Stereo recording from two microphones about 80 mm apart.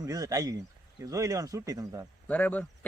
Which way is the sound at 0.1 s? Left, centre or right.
Right.